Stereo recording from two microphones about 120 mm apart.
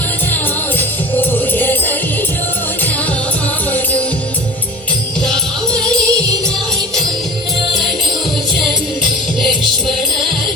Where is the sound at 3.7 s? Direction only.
15° left (ahead or behind).